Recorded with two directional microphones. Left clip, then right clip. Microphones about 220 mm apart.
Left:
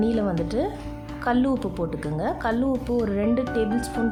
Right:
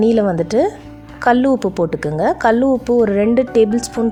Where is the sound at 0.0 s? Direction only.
30° right (ahead or behind).